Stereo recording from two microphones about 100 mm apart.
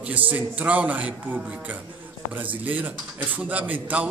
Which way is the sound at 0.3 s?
15° right (ahead or behind).